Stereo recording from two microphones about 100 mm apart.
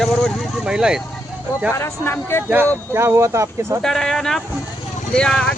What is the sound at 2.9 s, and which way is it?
Speech, 25° right (ahead or behind).